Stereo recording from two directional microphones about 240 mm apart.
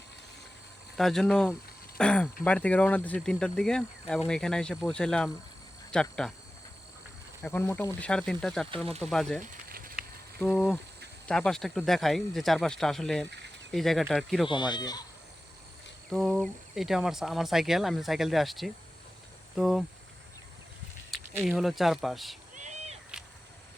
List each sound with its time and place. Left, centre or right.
0.9 s speech: centre
7.4 s speech: centre
9.4 s a sound: right
10.4 s speech: centre
14.4 s speech: centre
16.0 s speech: centre
21.3 s speech: centre
22.5 s a sound: right